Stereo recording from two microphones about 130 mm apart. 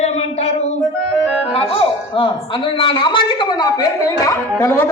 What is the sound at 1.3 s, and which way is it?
Music, 5° right (ahead or behind).